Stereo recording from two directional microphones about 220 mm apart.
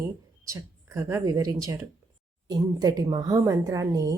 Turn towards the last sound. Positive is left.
turn(degrees=-15)  # may be behind; listen again after turning